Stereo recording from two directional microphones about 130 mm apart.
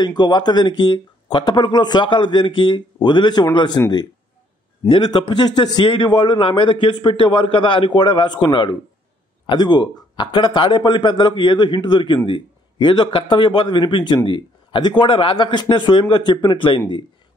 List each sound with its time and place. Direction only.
0.0 s a man's voice: 35° left (ahead or behind)
4.8 s a man's voice: 40° left (ahead or behind)